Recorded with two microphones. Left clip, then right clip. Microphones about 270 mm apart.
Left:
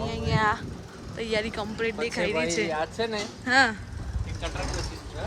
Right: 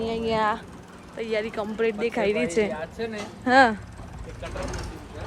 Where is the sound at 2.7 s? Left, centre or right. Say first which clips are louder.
Left 4 dB; left.